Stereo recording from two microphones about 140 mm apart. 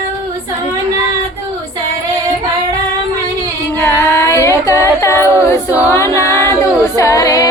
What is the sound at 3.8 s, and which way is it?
A capella, 20° left (ahead or behind).